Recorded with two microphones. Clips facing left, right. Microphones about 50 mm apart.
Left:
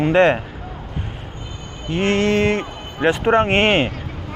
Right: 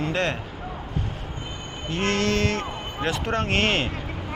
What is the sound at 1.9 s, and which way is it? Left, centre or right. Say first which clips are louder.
Speech: left 6 dB; left.